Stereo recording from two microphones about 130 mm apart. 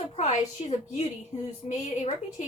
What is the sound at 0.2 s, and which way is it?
A woman's voice, 60° left (ahead or behind).